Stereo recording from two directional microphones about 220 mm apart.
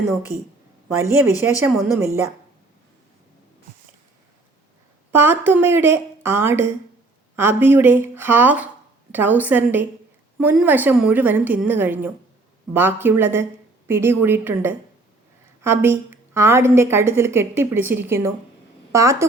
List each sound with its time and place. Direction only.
0.3 s a woman's voice: 30° right (ahead or behind)
1.5 s a woman's voice: 10° right (ahead or behind)
5.1 s a woman's voice: 10° right (ahead or behind)